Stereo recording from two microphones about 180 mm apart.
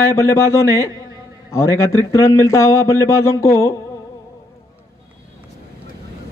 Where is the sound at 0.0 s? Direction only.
15° left (ahead or behind).